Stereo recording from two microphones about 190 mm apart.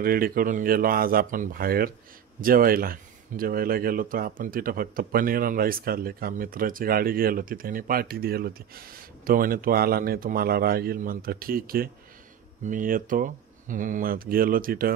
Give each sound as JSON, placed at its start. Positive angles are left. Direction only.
{"t": 0.0, "sound": "speech", "side_deg": -50}